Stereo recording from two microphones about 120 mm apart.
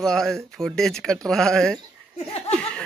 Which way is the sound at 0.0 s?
5° left (ahead or behind).